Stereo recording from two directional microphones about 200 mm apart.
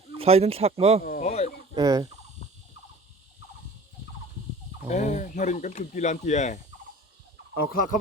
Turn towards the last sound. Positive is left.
turn(degrees=45)  # may be behind; listen again after turning